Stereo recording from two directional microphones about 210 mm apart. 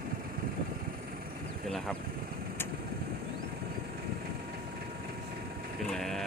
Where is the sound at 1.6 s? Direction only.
Centre (ahead or behind).